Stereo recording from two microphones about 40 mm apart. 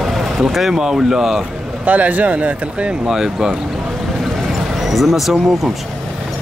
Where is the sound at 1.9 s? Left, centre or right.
Right.